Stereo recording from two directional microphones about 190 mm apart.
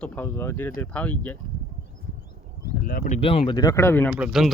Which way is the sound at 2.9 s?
45° left (ahead or behind).